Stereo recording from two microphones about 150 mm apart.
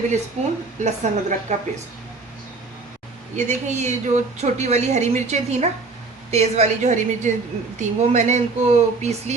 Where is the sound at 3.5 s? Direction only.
50° right (ahead or behind).